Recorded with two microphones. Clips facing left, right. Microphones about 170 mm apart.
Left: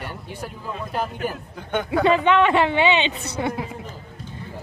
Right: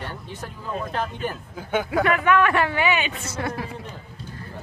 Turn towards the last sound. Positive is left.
turn(degrees=20)  # may be behind; listen again after turning